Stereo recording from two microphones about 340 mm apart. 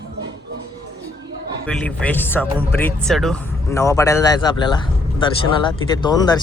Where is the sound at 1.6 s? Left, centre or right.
Centre.